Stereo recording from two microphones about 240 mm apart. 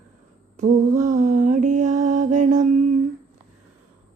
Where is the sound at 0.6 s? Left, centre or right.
Right.